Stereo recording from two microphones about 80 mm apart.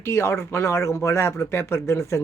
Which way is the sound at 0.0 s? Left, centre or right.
Left.